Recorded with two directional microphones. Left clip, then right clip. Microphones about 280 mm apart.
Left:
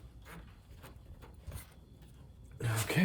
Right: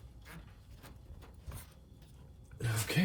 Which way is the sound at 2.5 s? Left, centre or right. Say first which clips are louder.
Left 1 dB; centre.